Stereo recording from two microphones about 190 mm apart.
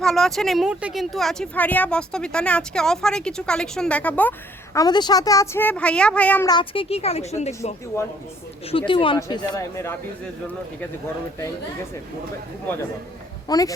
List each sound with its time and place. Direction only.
0.0 s speech: centre (ahead or behind)
6.5 s a woman's voice: 25° left (ahead or behind)
8.9 s speech: 25° left (ahead or behind)
13.5 s speech: 20° left (ahead or behind)